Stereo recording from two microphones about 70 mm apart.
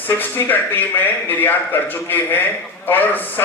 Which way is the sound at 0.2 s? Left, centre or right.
Left.